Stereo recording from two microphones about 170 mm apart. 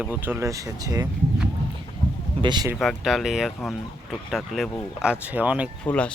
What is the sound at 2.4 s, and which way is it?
Speech, 25° right (ahead or behind).